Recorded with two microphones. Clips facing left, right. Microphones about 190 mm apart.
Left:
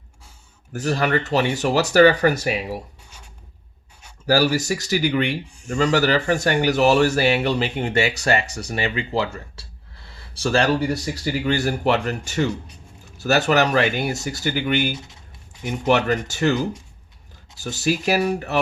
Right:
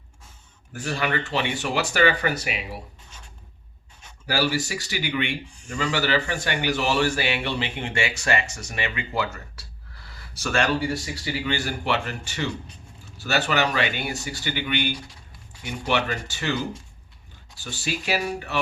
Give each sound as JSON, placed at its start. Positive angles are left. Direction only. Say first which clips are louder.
{"t": 0.7, "sound": "speech", "louder": "left 6 dB", "side_deg": 40}
{"t": 3.0, "sound": "writing", "louder": "left 1 dB", "side_deg": 10}
{"t": 4.3, "sound": "speech", "louder": "left 6 dB", "side_deg": 40}
{"t": 14.9, "sound": "speech", "louder": "left 2 dB", "side_deg": 20}
{"t": 15.9, "sound": "speech", "louder": "left 6 dB", "side_deg": 45}
{"t": 17.6, "sound": "speech", "louder": "left 8 dB", "side_deg": 40}